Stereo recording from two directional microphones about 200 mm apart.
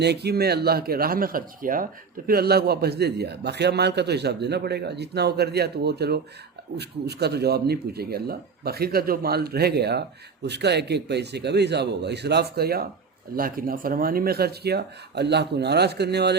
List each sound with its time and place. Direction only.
0.0 s speech: 55° right (ahead or behind)